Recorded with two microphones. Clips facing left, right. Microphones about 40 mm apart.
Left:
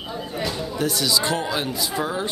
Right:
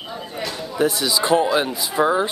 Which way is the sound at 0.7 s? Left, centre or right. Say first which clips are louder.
Right 4 dB; centre.